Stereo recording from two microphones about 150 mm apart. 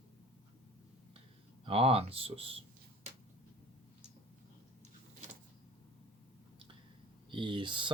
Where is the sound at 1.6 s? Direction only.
40° right (ahead or behind).